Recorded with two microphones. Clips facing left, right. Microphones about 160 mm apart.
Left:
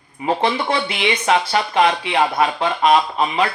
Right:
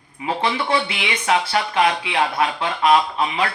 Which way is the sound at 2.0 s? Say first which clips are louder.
Left 3 dB; 45° left (ahead or behind).